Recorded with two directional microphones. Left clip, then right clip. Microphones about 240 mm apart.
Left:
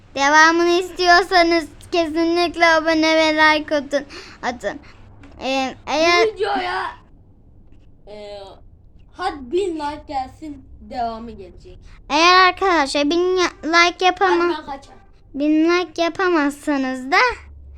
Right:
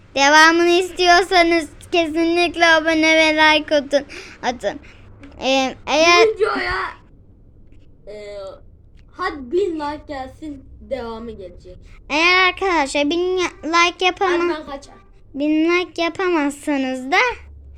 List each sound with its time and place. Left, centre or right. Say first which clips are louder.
0.1 s speech: right 2 dB; centre
9.1 s a child's voice: right 1 dB; centre
12.0 s a child's voice: left 2 dB; centre